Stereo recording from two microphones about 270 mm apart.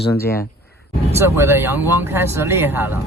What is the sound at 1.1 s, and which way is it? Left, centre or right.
Speech, centre.